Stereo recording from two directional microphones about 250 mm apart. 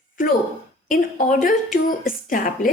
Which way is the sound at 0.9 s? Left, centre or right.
Left.